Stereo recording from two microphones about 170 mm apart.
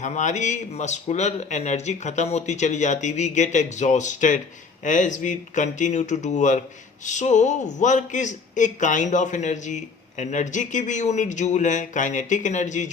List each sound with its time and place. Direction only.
0.0 s a man's voice: 45° left (ahead or behind)